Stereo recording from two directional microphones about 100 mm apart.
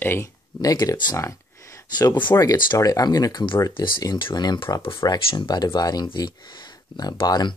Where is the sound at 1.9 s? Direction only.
45° left (ahead or behind).